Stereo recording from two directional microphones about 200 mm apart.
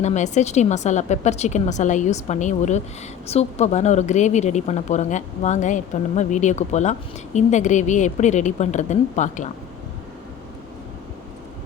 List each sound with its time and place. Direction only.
0.0 s a woman's voice: 35° left (ahead or behind)